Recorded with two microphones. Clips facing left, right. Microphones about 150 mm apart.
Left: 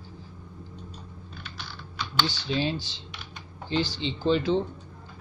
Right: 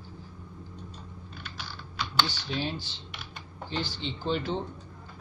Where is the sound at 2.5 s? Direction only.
90° left.